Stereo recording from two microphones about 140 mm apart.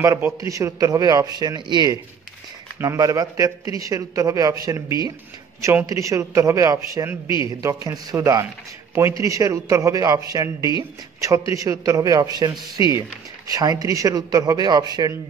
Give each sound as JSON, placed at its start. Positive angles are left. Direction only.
{"t": 0.0, "sound": "speech", "side_deg": -20}